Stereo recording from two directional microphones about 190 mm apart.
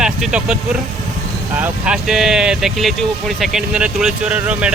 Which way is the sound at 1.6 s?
5° right (ahead or behind).